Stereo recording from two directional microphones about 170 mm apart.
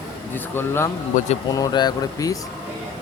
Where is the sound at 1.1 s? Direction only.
50° left (ahead or behind).